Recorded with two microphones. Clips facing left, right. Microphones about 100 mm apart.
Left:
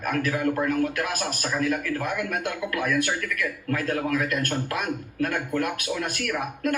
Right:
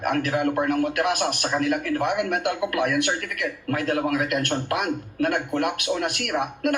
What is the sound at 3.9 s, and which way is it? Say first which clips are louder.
Speech: right 4 dB; 55° right (ahead or behind).